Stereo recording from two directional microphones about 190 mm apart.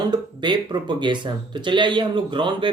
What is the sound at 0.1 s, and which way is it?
Speech, 25° right (ahead or behind).